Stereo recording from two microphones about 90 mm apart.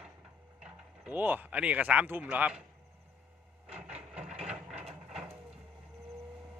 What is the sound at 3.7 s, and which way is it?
Wood, 10° right (ahead or behind).